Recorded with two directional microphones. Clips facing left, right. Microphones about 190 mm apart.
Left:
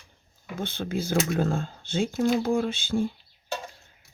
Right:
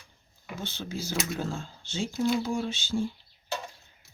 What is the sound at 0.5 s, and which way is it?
Speech, 55° left (ahead or behind).